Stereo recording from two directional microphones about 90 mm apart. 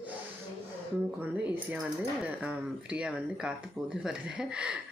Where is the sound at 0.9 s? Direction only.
20° right (ahead or behind).